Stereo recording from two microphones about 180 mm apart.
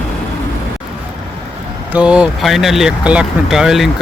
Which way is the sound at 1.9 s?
5° right (ahead or behind).